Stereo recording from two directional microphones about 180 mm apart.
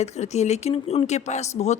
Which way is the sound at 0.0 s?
40° left (ahead or behind).